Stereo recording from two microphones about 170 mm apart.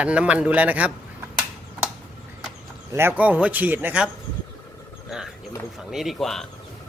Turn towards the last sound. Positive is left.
turn(degrees=0)  # may be behind; listen again after turning